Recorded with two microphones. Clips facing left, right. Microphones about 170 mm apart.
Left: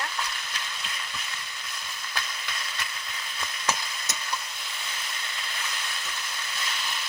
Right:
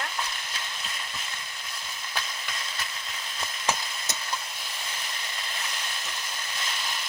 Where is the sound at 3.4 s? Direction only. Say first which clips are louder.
Right 1 dB; 25° right (ahead or behind).